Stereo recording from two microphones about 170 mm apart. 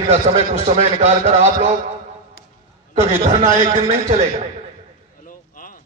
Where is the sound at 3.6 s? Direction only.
45° right (ahead or behind).